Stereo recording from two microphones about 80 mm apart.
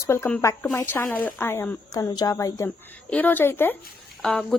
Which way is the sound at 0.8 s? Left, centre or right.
Left.